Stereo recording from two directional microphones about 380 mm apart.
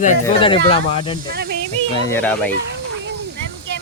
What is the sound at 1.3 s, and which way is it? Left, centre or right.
Speech, right.